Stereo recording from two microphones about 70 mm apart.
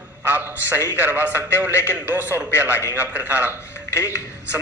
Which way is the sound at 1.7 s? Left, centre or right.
Left.